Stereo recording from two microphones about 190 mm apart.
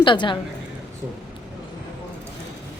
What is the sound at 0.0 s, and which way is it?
Speech, 25° left (ahead or behind).